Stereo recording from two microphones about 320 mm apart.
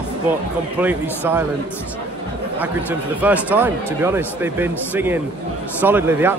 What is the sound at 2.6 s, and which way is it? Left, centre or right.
Speech, centre.